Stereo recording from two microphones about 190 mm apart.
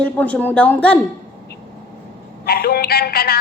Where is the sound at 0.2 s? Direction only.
10° left (ahead or behind).